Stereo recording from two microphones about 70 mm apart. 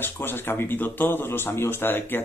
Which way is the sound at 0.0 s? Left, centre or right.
Left.